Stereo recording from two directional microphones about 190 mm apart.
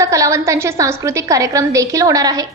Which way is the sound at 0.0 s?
15° right (ahead or behind).